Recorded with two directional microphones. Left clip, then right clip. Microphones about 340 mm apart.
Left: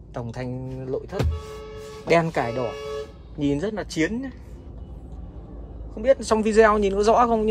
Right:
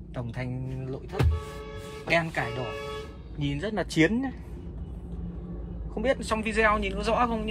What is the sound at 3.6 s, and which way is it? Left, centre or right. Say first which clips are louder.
Speech: even; centre.